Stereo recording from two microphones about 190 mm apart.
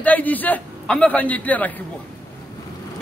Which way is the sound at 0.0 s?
10° left (ahead or behind).